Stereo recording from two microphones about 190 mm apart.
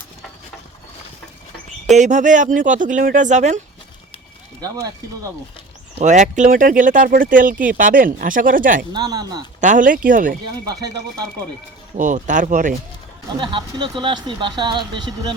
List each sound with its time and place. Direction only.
2.0 s speech: 40° right (ahead or behind)
4.6 s speech: 15° right (ahead or behind)
6.0 s speech: 40° right (ahead or behind)
8.9 s speech: 20° right (ahead or behind)
9.6 s speech: 40° right (ahead or behind)
10.7 s speech: 20° right (ahead or behind)
11.9 s speech: 40° right (ahead or behind)
13.4 s speech: 25° right (ahead or behind)